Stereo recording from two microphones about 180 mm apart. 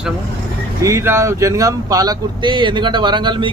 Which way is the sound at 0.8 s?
15° right (ahead or behind).